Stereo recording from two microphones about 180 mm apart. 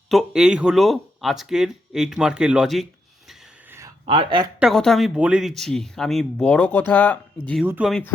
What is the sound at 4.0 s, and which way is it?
Speech, 30° right (ahead or behind).